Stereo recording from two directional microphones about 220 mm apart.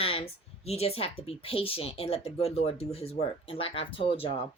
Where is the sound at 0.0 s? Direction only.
25° left (ahead or behind).